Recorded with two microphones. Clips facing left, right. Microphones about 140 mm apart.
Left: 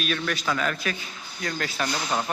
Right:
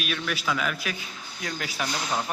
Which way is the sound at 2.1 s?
Centre (ahead or behind).